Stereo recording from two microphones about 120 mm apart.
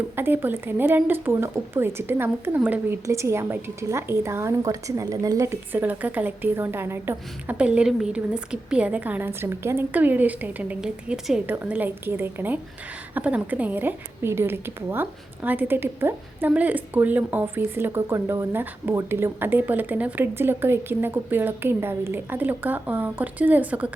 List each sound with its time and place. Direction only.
0.2 s a woman's voice: 15° right (ahead or behind)